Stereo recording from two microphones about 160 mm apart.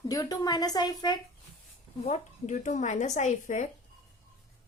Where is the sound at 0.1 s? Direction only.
25° left (ahead or behind).